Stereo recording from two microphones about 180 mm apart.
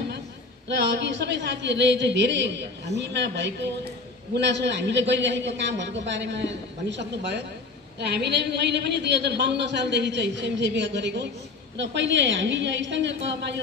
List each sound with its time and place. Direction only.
0.7 s a woman's voice: 75° right (ahead or behind)